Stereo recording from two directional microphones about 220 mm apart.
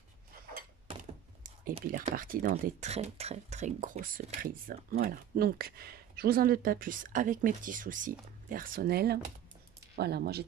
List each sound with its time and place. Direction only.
0.9 s thunk: 25° right (ahead or behind)
2.1 s speech: 40° right (ahead or behind)